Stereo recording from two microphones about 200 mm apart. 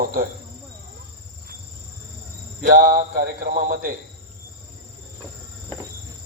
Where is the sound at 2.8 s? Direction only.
45° right (ahead or behind).